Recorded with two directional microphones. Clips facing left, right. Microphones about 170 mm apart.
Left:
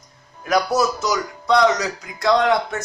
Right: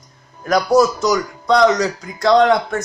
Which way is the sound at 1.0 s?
45° right (ahead or behind).